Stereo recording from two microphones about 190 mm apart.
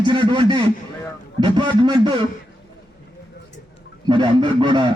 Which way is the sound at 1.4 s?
25° right (ahead or behind).